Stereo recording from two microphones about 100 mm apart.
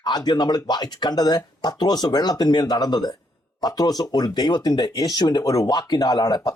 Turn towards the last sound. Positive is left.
turn(degrees=40)  # may be behind; listen again after turning